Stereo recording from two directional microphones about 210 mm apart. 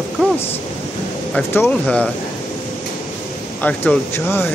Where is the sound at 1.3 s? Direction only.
10° left (ahead or behind).